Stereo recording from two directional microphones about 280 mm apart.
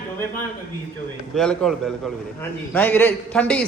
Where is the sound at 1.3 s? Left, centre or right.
Centre.